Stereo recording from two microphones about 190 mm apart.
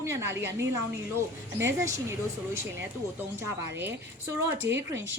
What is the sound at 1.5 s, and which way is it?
Speech, 15° right (ahead or behind).